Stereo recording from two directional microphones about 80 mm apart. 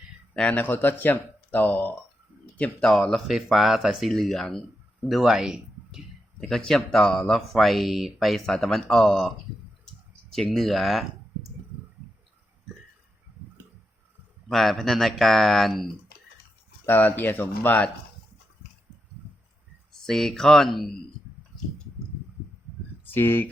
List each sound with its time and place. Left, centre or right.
0.5 s speech: left
2.6 s speech: centre
6.4 s speech: centre
9.8 s clicking: centre
14.4 s speech: centre
16.8 s speech: left
19.9 s speech: centre
23.1 s speech: left